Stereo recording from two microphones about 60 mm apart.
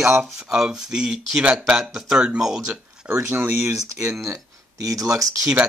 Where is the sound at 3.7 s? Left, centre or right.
Right.